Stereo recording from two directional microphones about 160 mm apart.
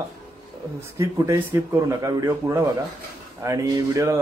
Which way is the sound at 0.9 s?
20° right (ahead or behind).